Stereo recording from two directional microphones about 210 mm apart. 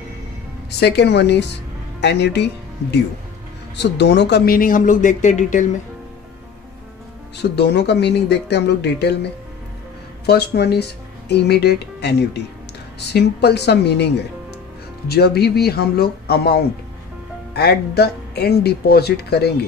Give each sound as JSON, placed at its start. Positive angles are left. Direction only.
{"t": 0.7, "sound": "speech", "side_deg": 50}
{"t": 7.5, "sound": "speech", "side_deg": 50}